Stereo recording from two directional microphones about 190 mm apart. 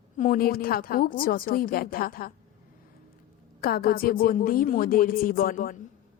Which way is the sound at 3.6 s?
50° left (ahead or behind).